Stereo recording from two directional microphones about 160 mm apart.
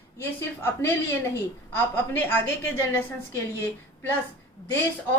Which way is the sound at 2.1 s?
10° left (ahead or behind).